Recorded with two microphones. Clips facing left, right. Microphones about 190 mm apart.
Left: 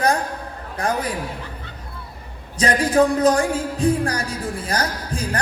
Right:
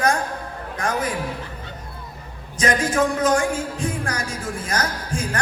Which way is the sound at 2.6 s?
35° left (ahead or behind).